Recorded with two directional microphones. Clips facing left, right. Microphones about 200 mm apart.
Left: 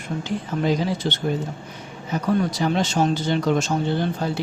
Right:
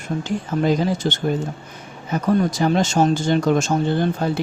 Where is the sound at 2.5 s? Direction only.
45° right (ahead or behind).